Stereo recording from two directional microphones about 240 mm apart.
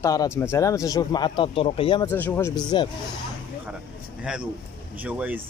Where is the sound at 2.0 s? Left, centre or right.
Centre.